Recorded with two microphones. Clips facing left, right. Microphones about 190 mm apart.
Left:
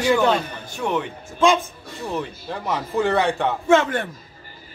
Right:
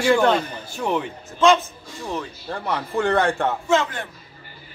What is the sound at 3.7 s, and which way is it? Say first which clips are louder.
Speech: left 6 dB; 55° left (ahead or behind).